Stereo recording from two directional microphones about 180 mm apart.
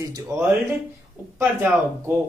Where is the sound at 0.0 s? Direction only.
15° right (ahead or behind).